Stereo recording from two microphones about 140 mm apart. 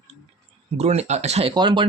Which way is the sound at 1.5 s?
35° right (ahead or behind).